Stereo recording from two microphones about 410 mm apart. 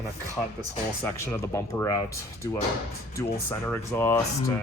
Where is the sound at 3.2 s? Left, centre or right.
Centre.